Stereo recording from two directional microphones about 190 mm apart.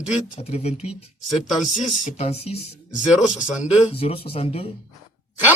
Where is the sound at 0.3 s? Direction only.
35° left (ahead or behind).